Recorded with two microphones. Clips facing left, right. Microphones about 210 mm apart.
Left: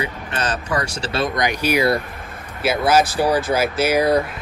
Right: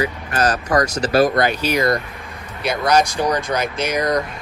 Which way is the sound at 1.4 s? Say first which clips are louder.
Even; 10° left (ahead or behind).